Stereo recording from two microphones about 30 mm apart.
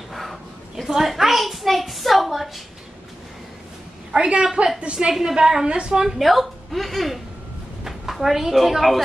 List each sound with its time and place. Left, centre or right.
0.1 s a sound: centre
4.1 s a woman's voice: right
4.9 s a woman's voice: right
5.2 s a woman's voice: right
6.0 s a woman's voice: centre